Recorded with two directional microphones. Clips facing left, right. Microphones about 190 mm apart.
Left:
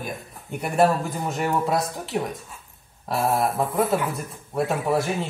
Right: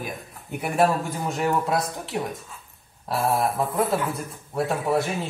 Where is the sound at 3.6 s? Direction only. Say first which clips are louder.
Left 1 dB; centre (ahead or behind).